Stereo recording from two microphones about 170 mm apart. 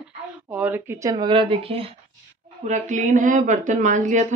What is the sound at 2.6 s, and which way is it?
Speech, 45° right (ahead or behind).